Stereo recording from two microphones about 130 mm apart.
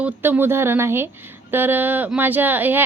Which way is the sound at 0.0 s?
15° right (ahead or behind).